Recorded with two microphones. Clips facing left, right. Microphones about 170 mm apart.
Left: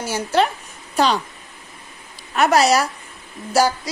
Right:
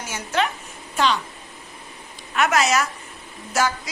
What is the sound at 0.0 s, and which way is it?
A woman's voice, 35° left (ahead or behind).